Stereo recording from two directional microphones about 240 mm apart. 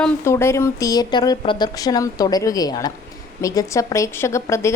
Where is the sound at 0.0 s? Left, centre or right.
Centre.